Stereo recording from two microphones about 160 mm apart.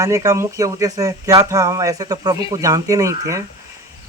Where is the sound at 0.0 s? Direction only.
20° right (ahead or behind).